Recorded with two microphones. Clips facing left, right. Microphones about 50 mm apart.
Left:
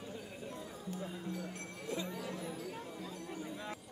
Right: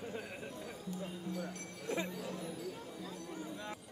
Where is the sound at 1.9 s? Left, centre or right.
Right.